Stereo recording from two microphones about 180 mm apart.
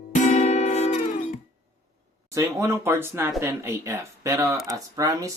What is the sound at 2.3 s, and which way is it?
Music, 15° right (ahead or behind).